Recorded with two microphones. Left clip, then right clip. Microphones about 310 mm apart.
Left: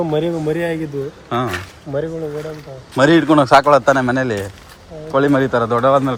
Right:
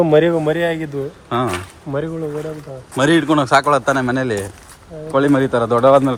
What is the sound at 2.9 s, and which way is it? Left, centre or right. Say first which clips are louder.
A man's voice: left 3 dB; centre.